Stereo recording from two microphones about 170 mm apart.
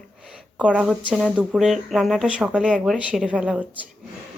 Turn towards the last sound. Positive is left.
turn(degrees=-5)  # may be behind; listen again after turning